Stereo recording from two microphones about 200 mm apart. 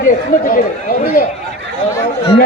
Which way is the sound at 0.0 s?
45° left (ahead or behind).